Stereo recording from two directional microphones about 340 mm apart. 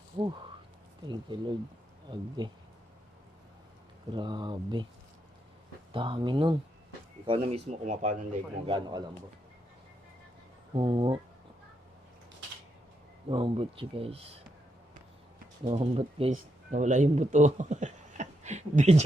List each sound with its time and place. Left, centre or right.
1.0 s a man's voice: centre
4.1 s a man's voice: centre
5.9 s a man's voice: centre
10.8 s a man's voice: centre
13.3 s a man's voice: centre
15.6 s speech: centre